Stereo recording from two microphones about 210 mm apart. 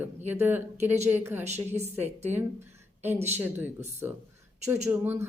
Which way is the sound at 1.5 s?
30° right (ahead or behind).